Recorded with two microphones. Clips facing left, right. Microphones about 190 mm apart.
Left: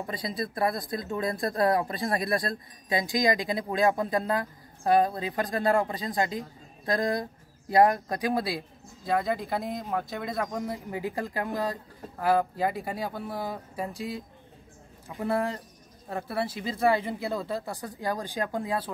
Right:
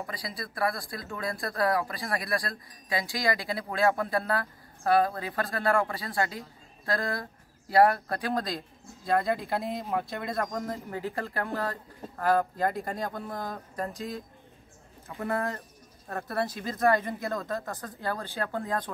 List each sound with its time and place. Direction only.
0.0 s speech: 25° left (ahead or behind)